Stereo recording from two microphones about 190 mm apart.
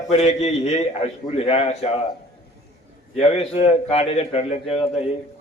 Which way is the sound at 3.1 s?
35° left (ahead or behind).